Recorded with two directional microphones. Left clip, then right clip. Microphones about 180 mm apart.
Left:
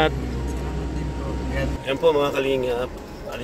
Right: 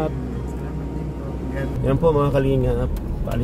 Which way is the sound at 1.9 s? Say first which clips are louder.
Right 1 dB; centre (ahead or behind).